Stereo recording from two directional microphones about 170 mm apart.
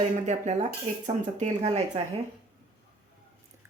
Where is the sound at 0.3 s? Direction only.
40° right (ahead or behind).